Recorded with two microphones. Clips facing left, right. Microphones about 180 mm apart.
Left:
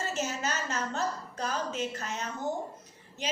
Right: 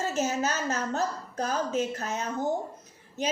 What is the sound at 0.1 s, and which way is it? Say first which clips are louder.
A woman's voice: right 5 dB; 40° right (ahead or behind).